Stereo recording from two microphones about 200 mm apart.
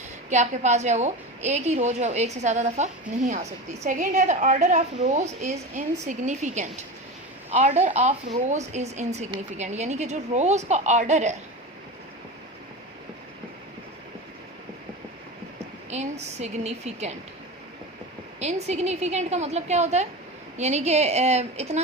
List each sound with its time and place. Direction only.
0.3 s a woman's voice: 35° right (ahead or behind)
15.9 s a woman's voice: 35° right (ahead or behind)
18.3 s a woman's voice: 35° right (ahead or behind)